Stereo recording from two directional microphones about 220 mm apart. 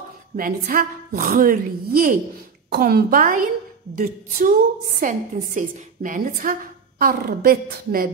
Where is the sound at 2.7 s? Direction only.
45° right (ahead or behind).